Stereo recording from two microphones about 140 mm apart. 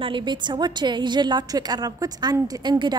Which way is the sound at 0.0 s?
35° right (ahead or behind).